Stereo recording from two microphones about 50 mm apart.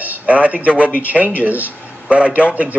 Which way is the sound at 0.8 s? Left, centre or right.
Left.